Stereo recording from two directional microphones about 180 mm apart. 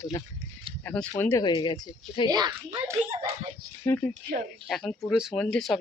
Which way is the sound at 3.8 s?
15° left (ahead or behind).